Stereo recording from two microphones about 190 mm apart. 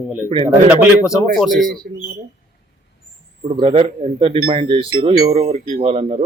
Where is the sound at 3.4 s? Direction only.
30° right (ahead or behind).